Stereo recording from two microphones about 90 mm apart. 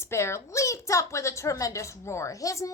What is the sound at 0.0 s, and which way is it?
A woman's voice, 30° left (ahead or behind).